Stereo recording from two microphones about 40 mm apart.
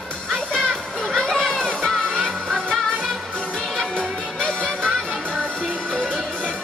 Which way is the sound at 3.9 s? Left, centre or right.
Left.